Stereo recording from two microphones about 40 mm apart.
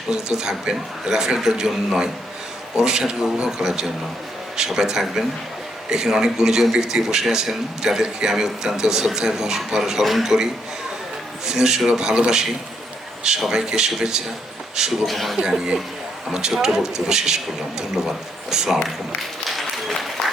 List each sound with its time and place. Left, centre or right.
0.1 s a man's voice: centre
10.0 s speech: centre
10.2 s a man's voice: centre
12.1 s speech: right
13.4 s a man's voice: centre
15.0 s speech: centre
15.4 s a man's voice: centre
19.5 s applause: centre